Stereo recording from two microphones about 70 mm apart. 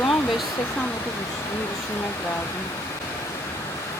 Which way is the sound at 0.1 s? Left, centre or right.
Centre.